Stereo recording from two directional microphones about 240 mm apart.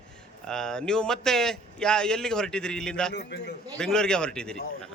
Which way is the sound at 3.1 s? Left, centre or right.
Left.